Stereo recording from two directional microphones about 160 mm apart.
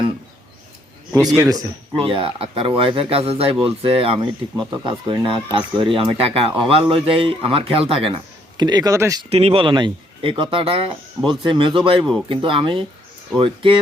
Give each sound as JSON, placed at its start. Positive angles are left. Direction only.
{"t": 1.1, "sound": "a man's voice", "side_deg": -20}
{"t": 2.0, "sound": "speech", "side_deg": -35}
{"t": 9.3, "sound": "speech", "side_deg": -40}